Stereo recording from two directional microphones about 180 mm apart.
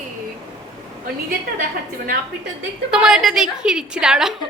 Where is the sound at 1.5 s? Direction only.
50° right (ahead or behind).